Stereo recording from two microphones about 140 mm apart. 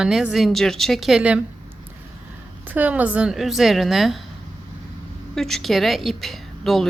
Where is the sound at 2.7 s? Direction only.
10° right (ahead or behind).